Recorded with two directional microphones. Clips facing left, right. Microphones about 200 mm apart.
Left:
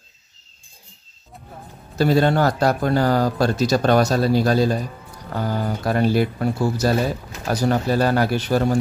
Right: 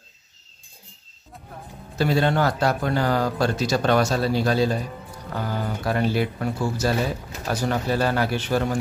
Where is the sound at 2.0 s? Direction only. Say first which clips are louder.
Left 4 dB; 40° left (ahead or behind).